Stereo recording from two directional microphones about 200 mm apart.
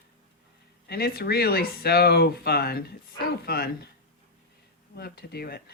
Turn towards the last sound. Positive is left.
turn(degrees=50)  # may be behind; listen again after turning